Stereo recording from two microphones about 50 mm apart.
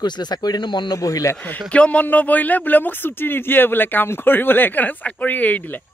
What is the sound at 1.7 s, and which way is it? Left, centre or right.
Speech, left.